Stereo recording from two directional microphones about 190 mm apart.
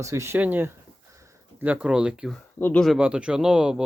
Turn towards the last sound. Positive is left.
turn(degrees=-5)  # may be behind; listen again after turning